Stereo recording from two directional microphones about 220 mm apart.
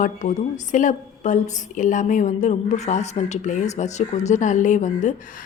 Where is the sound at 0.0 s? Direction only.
35° left (ahead or behind).